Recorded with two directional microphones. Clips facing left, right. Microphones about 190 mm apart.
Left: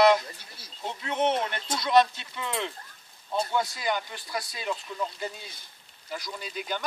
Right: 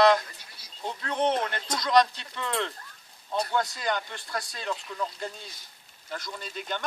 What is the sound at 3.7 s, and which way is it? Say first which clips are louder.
Speech: even; 5° left (ahead or behind).